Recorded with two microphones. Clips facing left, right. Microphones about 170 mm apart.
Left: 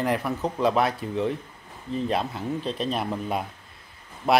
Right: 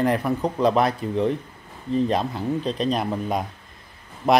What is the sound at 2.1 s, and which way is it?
Speech, 35° right (ahead or behind).